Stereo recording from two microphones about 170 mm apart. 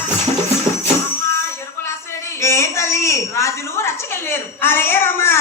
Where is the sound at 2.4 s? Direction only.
15° left (ahead or behind).